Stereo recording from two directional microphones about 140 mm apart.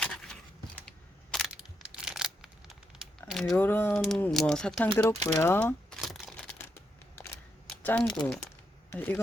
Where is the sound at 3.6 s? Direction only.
15° left (ahead or behind).